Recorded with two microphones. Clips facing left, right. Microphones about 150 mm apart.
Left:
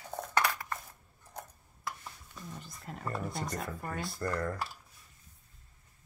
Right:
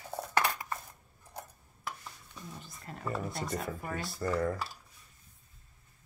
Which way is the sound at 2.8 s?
Centre (ahead or behind).